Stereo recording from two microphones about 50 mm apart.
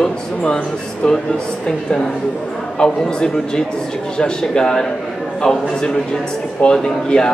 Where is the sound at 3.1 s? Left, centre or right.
Centre.